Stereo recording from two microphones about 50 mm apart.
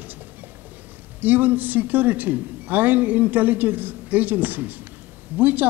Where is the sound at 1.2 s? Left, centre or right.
Right.